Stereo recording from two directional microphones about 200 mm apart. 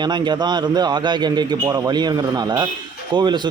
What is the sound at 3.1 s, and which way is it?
Speech, 20° right (ahead or behind).